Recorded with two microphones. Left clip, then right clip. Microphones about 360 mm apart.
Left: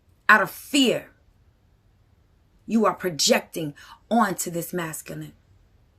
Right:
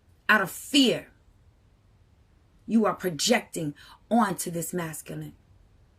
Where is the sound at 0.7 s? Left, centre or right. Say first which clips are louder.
Right 1 dB; centre.